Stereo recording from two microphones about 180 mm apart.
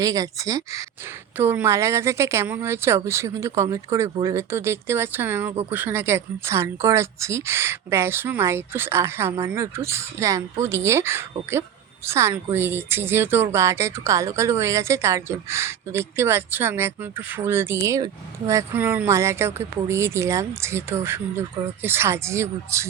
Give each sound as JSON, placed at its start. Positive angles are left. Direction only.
{"t": 0.0, "sound": "speech", "side_deg": -20}